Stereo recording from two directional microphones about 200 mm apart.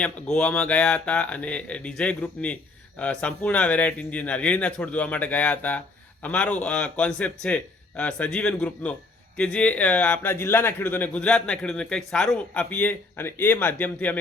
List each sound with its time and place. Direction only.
0.0 s a man's voice: 5° left (ahead or behind)